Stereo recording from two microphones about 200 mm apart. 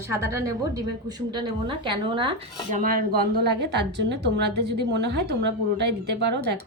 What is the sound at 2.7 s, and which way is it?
A woman's voice, 45° right (ahead or behind).